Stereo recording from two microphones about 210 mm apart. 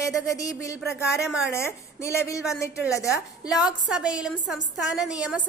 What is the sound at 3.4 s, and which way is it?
A woman's voice, centre (ahead or behind).